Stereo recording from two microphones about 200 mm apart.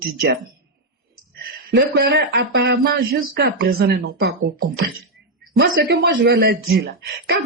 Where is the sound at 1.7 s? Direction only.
55° right (ahead or behind).